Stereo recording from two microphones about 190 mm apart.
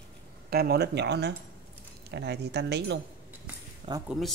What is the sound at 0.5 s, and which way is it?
Speech, 55° right (ahead or behind).